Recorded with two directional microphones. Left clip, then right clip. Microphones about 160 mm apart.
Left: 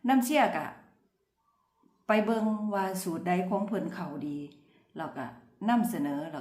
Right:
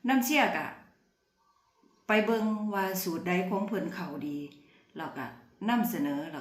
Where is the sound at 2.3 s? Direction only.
25° left (ahead or behind).